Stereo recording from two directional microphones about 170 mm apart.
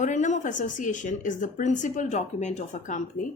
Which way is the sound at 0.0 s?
45° left (ahead or behind).